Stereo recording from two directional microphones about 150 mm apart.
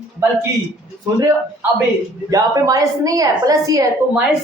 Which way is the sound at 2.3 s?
25° right (ahead or behind).